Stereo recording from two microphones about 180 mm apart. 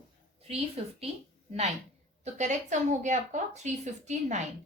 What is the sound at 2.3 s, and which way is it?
A woman's voice, 40° right (ahead or behind).